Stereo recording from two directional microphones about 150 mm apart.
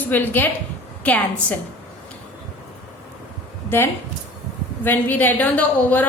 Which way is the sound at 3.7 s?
15° left (ahead or behind).